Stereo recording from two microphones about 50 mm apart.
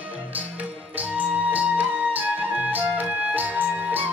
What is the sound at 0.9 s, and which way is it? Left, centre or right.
Music, right.